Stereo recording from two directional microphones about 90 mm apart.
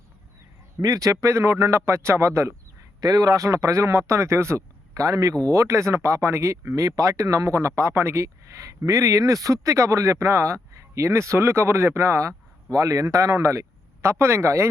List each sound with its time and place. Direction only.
0.8 s a man's voice: 40° right (ahead or behind)
3.0 s a man's voice: 45° right (ahead or behind)